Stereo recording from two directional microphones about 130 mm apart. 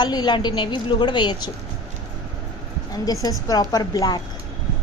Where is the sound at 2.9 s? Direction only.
30° left (ahead or behind).